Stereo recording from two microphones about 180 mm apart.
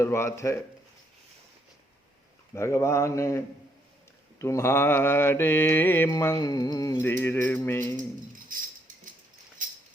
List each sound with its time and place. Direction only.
0.0 s mantra: 15° left (ahead or behind)
2.6 s mantra: 15° left (ahead or behind)
8.5 s a sound: 45° right (ahead or behind)